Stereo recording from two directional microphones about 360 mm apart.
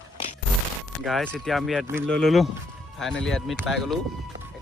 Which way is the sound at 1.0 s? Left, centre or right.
Centre.